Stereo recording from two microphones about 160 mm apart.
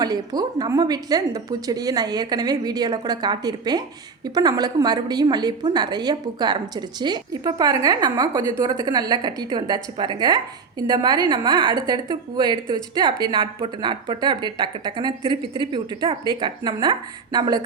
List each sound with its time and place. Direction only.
0.0 s a woman's voice: 25° right (ahead or behind)